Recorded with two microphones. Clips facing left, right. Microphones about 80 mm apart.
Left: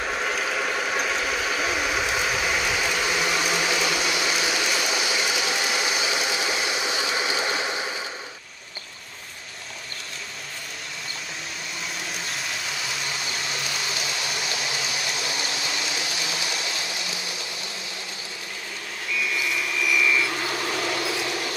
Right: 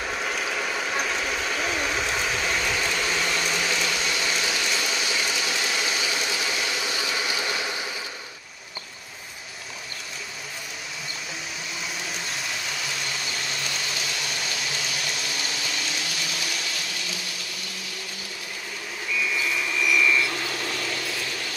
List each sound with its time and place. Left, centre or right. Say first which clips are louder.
0.0 s train: left 2 dB; centre; by 7.9 s left
12.1 s vehicle: even; centre
19.1 s vehicle: even; centre
20.9 s mechanisms: left 4 dB; centre